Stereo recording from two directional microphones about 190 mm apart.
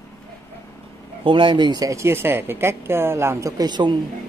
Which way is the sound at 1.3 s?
25° right (ahead or behind).